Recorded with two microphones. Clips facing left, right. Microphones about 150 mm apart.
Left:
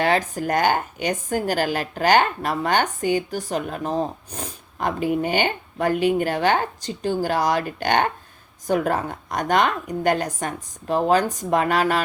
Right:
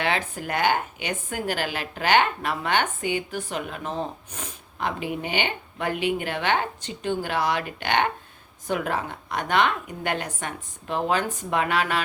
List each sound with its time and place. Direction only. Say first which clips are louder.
0.0 s a woman's voice: left 6 dB; 40° left (ahead or behind)